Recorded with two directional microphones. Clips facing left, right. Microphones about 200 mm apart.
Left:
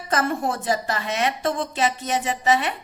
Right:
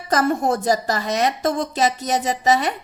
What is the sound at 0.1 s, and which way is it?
A woman's voice, 40° right (ahead or behind).